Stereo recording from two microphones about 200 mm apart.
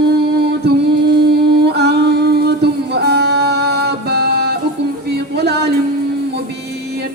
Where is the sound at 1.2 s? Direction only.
55° right (ahead or behind).